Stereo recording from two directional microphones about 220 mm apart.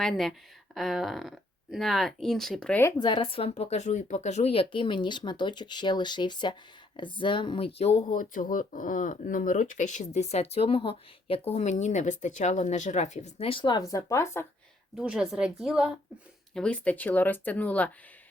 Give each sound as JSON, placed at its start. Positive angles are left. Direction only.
{"t": 0.0, "sound": "speech", "side_deg": 0}
{"t": 3.0, "sound": "speech", "side_deg": 20}
{"t": 14.9, "sound": "speech", "side_deg": -5}